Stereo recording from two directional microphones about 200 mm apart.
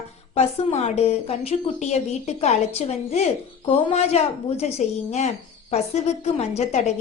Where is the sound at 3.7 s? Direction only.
30° left (ahead or behind).